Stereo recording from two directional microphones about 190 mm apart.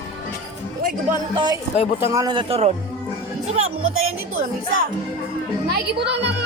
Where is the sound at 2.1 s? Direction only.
20° right (ahead or behind).